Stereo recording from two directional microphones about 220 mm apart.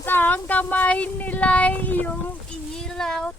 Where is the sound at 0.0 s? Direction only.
10° left (ahead or behind).